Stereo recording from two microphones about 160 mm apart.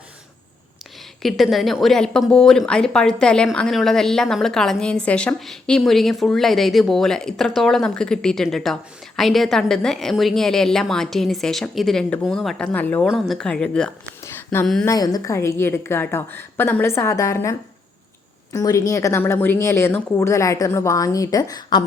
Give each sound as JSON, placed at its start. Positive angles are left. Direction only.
{"t": 1.2, "sound": "a woman's voice", "side_deg": 0}
{"t": 14.3, "sound": "a sound", "side_deg": 15}
{"t": 14.8, "sound": "a woman's voice", "side_deg": 25}
{"t": 18.5, "sound": "a woman's voice", "side_deg": 20}